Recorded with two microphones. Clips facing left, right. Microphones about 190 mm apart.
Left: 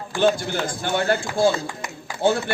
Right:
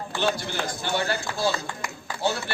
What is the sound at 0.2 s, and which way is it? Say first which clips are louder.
A man's voice: left 7 dB; 50° left (ahead or behind).